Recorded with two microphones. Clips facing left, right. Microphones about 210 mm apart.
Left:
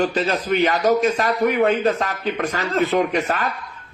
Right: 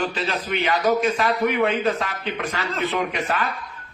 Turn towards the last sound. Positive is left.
turn(degrees=40)  # may be behind; listen again after turning